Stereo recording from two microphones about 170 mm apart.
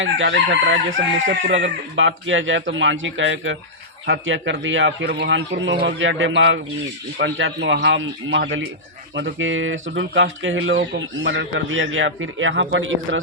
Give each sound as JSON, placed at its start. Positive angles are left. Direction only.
{"t": 0.3, "sound": "chicken", "side_deg": -90}